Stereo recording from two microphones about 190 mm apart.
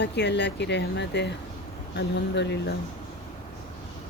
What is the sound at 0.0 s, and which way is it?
Speech, 65° left (ahead or behind).